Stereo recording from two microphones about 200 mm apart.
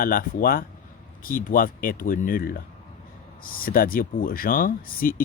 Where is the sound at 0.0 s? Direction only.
45° left (ahead or behind).